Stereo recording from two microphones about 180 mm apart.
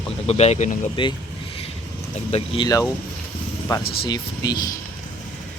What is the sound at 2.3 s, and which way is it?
Speech, 30° left (ahead or behind).